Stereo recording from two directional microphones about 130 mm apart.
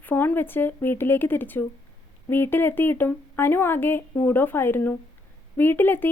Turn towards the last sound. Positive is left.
turn(degrees=15)  # may be behind; listen again after turning